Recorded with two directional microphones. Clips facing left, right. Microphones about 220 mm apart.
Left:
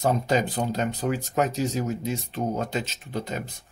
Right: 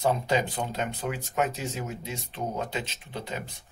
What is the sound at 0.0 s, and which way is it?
Speech, 40° left (ahead or behind).